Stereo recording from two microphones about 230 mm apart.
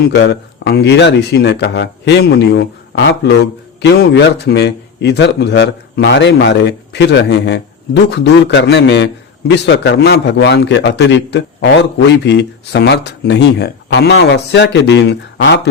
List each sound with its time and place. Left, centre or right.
0.1 s a man's voice: left